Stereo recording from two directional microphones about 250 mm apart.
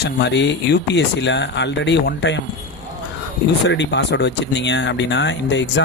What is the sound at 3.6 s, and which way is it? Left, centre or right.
Speech, left.